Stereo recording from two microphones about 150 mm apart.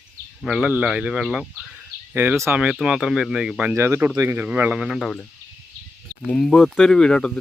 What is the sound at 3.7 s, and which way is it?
Speech, 15° right (ahead or behind).